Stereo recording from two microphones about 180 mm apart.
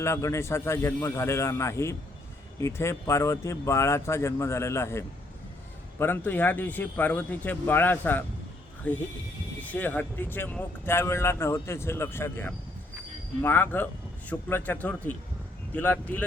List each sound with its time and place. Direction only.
0.0 s speech: 15° left (ahead or behind)